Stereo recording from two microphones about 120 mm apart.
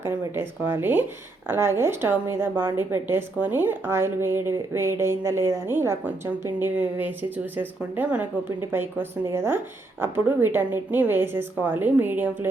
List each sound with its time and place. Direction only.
0.0 s a woman's voice: 20° right (ahead or behind)